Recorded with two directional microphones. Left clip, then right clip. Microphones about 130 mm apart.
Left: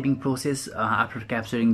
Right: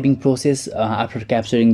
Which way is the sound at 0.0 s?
25° right (ahead or behind).